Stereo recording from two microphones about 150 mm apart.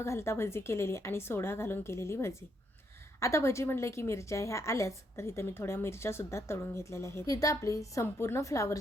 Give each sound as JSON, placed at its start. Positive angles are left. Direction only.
{"t": 0.0, "sound": "a woman's voice", "side_deg": 20}